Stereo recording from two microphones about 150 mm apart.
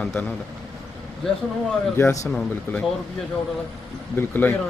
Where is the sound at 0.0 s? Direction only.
10° left (ahead or behind).